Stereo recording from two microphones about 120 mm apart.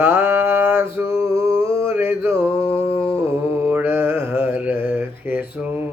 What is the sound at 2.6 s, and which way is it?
Mantra, 50° left (ahead or behind).